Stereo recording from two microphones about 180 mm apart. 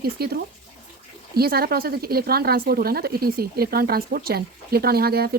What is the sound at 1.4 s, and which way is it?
A woman's voice, 55° right (ahead or behind).